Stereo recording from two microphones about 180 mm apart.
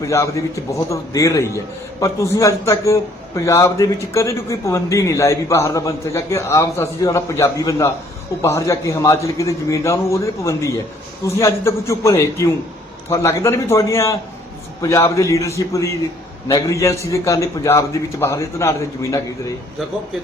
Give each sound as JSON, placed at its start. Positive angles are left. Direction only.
{"t": 0.0, "sound": "a man's voice", "side_deg": 15}